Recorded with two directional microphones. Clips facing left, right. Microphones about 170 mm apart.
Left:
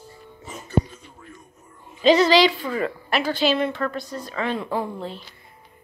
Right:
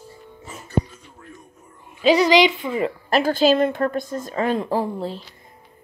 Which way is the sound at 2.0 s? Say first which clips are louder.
Right 1 dB; 10° right (ahead or behind).